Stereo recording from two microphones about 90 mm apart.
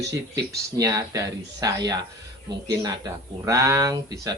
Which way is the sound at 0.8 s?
40° right (ahead or behind).